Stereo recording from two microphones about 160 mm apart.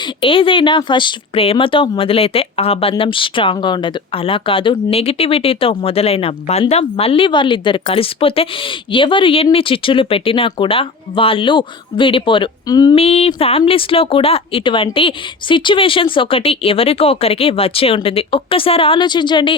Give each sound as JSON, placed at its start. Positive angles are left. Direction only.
{"t": 0.2, "sound": "speech", "side_deg": 35}
{"t": 13.0, "sound": "speech", "side_deg": 40}